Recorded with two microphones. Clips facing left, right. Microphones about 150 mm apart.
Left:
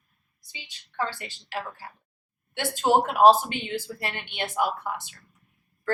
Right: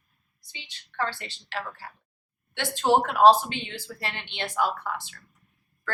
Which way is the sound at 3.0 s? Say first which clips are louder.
Even; 10° left (ahead or behind).